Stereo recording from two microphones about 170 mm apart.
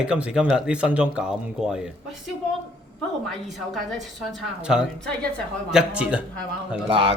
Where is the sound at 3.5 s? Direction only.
Centre (ahead or behind).